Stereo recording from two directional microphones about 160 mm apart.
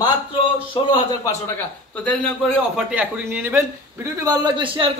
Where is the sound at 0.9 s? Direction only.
25° left (ahead or behind).